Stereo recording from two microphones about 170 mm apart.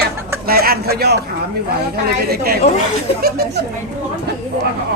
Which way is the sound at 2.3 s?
65° right (ahead or behind).